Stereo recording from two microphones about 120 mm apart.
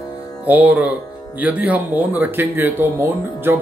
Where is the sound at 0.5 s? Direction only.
15° right (ahead or behind).